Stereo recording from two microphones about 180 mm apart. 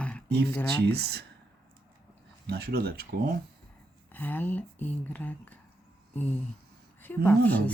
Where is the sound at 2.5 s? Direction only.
60° right (ahead or behind).